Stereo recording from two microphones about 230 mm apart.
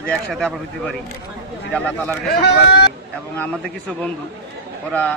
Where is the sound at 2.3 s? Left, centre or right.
Left.